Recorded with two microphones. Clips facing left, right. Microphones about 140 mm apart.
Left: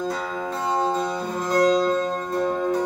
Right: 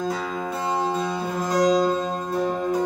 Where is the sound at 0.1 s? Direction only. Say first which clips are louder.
Even; 5° right (ahead or behind).